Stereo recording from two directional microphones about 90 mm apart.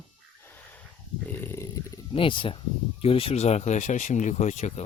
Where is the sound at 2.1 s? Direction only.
70° left (ahead or behind).